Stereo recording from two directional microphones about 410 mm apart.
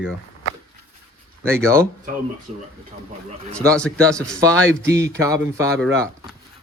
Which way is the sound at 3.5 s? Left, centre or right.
Centre.